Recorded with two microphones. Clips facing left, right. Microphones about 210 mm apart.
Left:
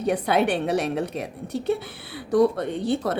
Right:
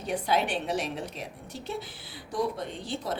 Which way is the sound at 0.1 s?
60° left (ahead or behind).